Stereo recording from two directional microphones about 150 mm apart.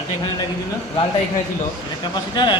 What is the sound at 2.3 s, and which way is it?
Speech, 30° left (ahead or behind).